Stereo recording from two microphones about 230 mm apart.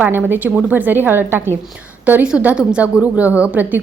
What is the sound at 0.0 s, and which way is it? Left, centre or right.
A woman's voice, centre.